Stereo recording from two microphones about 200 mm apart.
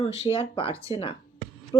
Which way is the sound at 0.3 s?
25° left (ahead or behind).